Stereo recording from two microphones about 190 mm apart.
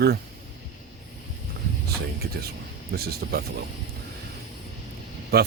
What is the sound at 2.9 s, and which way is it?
Speech, 55° right (ahead or behind).